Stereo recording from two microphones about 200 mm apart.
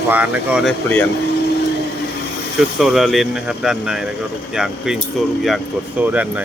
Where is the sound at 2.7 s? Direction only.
Centre (ahead or behind).